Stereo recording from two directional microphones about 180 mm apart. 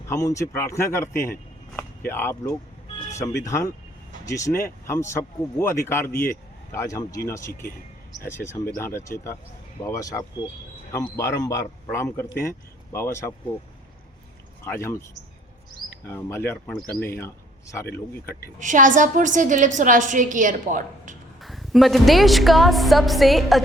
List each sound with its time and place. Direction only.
0.1 s speech: 15° left (ahead or behind)
8.8 s speech: 15° left (ahead or behind)
14.6 s speech: 15° left (ahead or behind)
16.0 s a man's voice: 15° left (ahead or behind)
18.6 s a woman's voice: 45° right (ahead or behind)
21.4 s a woman's voice: centre (ahead or behind)